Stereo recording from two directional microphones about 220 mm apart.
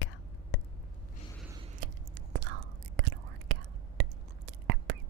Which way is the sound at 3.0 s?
55° right (ahead or behind).